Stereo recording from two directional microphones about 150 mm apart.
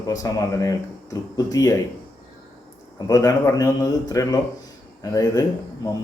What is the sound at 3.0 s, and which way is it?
Speech, 25° left (ahead or behind).